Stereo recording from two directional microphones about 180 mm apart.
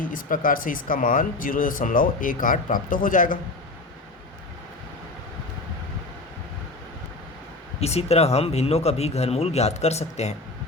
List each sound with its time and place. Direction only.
0.0 s speech: 50° left (ahead or behind)
7.8 s speech: 35° left (ahead or behind)